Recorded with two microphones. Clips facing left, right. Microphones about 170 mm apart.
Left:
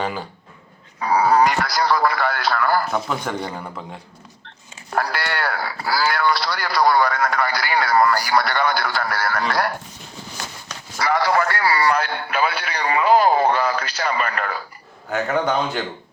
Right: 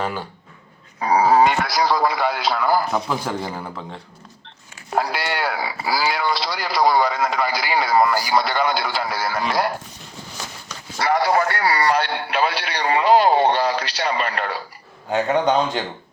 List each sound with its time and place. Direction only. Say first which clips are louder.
0.0 s a man's voice: even; centre (ahead or behind)
0.9 s speech: right 1 dB; 25° right (ahead or behind)
2.9 s a man's voice: right 1 dB; 5° right (ahead or behind)
4.9 s speech: right 1 dB; 20° right (ahead or behind)
10.9 s speech: right 1 dB; 30° right (ahead or behind)